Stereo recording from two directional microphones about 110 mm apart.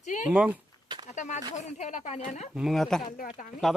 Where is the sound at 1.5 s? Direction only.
90° left.